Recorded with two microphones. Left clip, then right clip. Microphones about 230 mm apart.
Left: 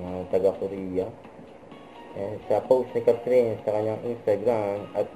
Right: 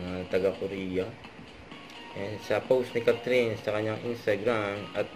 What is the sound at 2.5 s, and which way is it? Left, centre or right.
Speech, right.